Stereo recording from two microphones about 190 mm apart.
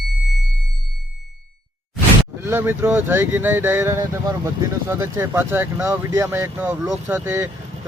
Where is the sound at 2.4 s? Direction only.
10° right (ahead or behind).